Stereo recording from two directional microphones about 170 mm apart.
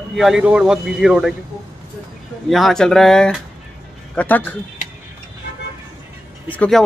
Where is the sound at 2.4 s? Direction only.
Centre (ahead or behind).